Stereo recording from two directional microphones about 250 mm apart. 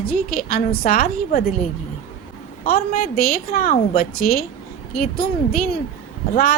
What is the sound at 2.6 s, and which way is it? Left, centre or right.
A woman's voice, left.